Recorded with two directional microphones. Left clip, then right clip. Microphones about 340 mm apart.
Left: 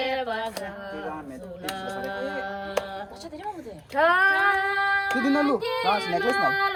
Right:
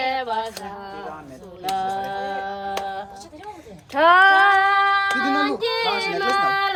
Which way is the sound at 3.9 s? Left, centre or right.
Centre.